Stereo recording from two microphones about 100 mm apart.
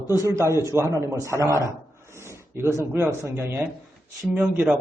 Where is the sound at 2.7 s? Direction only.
25° right (ahead or behind).